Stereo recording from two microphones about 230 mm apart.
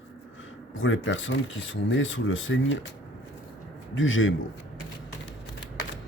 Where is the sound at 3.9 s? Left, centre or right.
Left.